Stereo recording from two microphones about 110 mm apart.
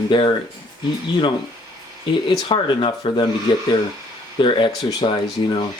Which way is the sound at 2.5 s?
50° left (ahead or behind).